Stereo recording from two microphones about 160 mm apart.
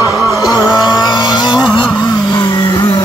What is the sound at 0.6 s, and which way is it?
Vehicle, 25° left (ahead or behind).